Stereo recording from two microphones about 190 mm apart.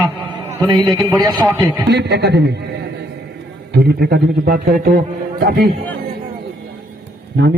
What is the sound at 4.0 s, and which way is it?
A man's voice, 55° right (ahead or behind).